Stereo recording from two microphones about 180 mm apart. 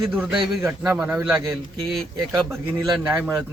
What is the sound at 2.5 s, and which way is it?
Speech, 15° right (ahead or behind).